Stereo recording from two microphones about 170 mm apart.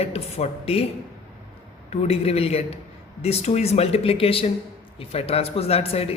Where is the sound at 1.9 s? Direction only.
40° left (ahead or behind).